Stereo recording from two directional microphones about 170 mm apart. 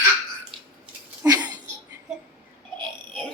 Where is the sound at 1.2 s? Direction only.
20° right (ahead or behind).